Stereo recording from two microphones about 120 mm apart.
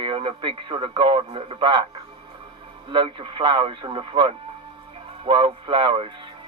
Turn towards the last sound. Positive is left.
turn(degrees=-45)  # may be behind; listen again after turning